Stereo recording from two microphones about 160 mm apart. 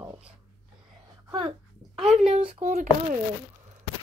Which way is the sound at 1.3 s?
30° right (ahead or behind).